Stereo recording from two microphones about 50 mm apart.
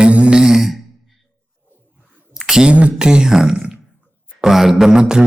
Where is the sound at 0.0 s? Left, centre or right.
Right.